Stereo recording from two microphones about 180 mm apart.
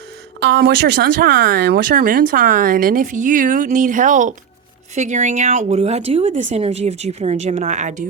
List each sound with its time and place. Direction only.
0.4 s speech: 70° right (ahead or behind); by 8.0 s 45° right (ahead or behind)